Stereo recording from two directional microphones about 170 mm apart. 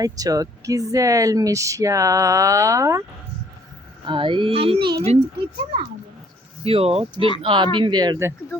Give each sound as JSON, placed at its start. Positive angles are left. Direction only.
{"t": 0.0, "sound": "speech", "side_deg": -20}
{"t": 4.0, "sound": "speech", "side_deg": -30}
{"t": 6.7, "sound": "speech", "side_deg": -35}